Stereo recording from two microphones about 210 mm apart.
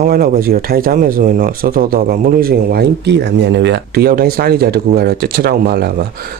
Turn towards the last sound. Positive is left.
turn(degrees=-45)  # may be behind; listen again after turning